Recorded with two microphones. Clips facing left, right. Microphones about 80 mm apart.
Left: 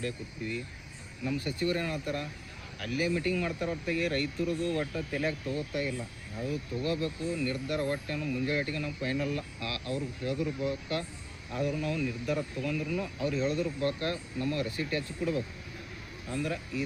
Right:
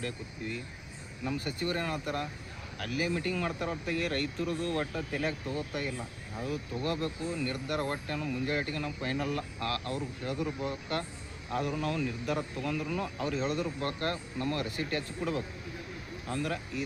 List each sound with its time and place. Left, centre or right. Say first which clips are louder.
1.6 s speech: left 2 dB; right